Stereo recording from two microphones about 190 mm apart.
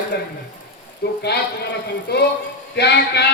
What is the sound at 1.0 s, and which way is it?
A man's voice, 55° left (ahead or behind).